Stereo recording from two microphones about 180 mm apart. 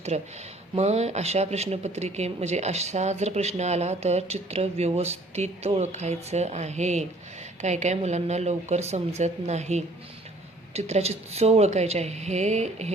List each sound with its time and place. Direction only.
0.1 s speech: 35° right (ahead or behind)